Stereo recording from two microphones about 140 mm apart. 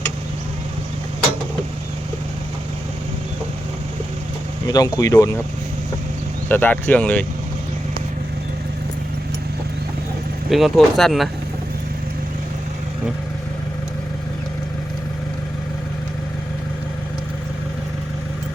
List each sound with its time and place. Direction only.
4.6 s speech: 25° left (ahead or behind)
6.5 s speech: 15° left (ahead or behind)
10.5 s speech: centre (ahead or behind)